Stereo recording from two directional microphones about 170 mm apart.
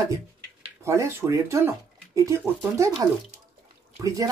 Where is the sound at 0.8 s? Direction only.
15° right (ahead or behind).